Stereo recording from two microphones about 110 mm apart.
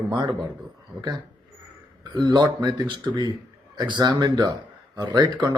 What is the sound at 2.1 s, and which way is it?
A man's voice, 40° right (ahead or behind).